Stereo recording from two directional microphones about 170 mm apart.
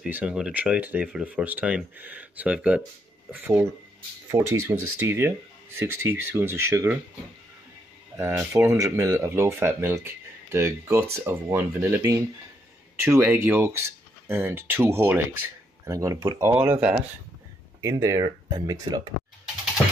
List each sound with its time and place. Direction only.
0.0 s speech: 5° right (ahead or behind)
8.2 s speech: 15° right (ahead or behind)